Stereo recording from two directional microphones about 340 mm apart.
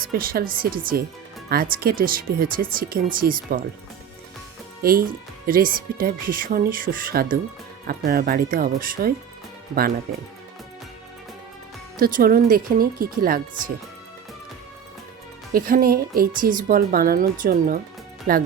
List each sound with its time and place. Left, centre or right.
0.1 s speech: right
4.8 s speech: right
11.9 s speech: right
15.5 s speech: right